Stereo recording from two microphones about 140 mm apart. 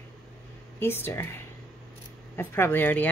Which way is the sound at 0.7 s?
15° left (ahead or behind).